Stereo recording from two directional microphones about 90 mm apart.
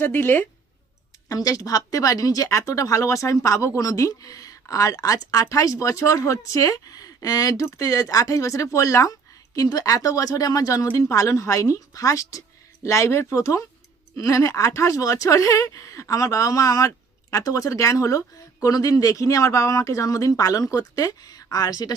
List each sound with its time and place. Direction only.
0.0 s speech: 25° left (ahead or behind)
1.3 s speech: 40° left (ahead or behind)